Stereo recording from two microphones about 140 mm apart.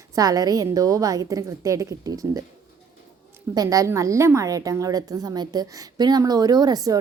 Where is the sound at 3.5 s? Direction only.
25° right (ahead or behind).